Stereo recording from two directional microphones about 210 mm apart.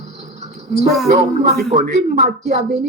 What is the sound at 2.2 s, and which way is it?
Speech, 35° right (ahead or behind).